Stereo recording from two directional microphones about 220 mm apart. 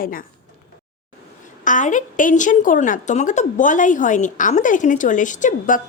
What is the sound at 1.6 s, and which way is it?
A woman's voice, 35° left (ahead or behind).